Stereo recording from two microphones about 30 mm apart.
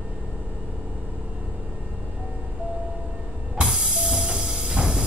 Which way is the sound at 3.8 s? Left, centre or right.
Right.